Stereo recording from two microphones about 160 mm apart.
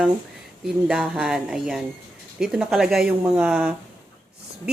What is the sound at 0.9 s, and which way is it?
Speech, 5° right (ahead or behind).